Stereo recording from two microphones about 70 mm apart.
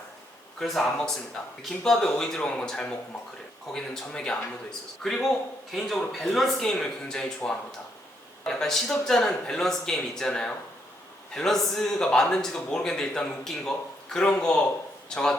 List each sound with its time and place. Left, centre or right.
0.6 s speech: centre